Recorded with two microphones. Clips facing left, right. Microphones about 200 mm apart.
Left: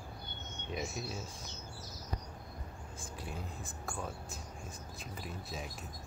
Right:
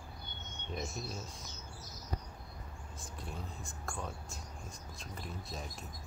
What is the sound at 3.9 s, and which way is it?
Speech, centre (ahead or behind).